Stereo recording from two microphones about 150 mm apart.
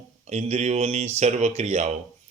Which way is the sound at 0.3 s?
45° right (ahead or behind).